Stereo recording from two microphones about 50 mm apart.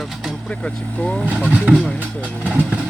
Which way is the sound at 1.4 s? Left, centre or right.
Right.